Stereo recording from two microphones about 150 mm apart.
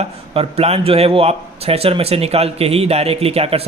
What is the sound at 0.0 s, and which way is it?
A man's voice, 45° right (ahead or behind).